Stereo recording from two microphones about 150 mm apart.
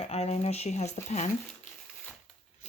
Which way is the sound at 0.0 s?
45° left (ahead or behind).